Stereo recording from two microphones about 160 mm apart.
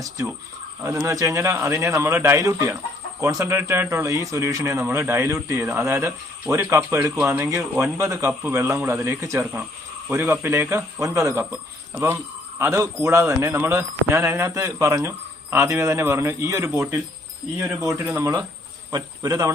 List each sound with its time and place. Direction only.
0.9 s speech: 15° right (ahead or behind)
9.4 s speech: 5° right (ahead or behind)
12.5 s speech: 15° right (ahead or behind)